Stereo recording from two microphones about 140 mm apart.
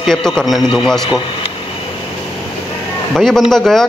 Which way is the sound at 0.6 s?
35° left (ahead or behind).